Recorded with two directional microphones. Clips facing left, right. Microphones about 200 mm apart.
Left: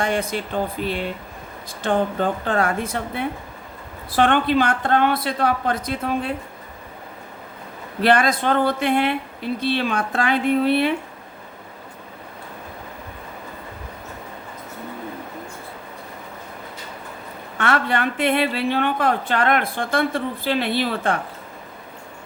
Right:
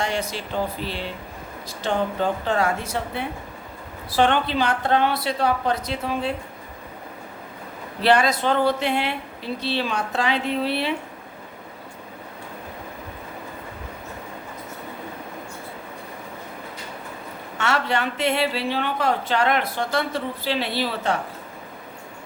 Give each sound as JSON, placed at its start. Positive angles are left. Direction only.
{"t": 0.0, "sound": "a woman's voice", "side_deg": 55}
{"t": 8.0, "sound": "a woman's voice", "side_deg": 50}
{"t": 17.6, "sound": "a woman's voice", "side_deg": 55}